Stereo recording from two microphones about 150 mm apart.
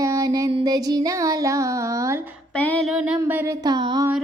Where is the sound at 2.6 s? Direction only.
10° left (ahead or behind).